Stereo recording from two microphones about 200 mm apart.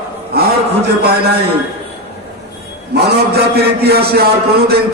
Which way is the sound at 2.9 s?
55° right (ahead or behind).